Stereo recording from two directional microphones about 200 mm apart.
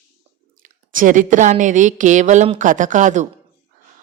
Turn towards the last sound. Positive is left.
turn(degrees=-40)  # may be behind; listen again after turning